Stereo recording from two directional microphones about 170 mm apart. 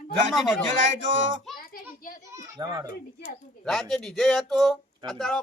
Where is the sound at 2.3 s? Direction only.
20° right (ahead or behind).